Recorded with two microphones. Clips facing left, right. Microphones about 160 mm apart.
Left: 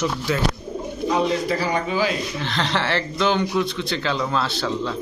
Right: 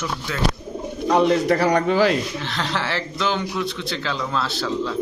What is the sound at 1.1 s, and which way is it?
A man's voice, 60° right (ahead or behind).